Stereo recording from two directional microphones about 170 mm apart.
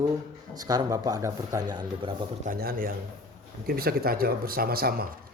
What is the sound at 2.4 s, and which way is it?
Speech, 60° right (ahead or behind).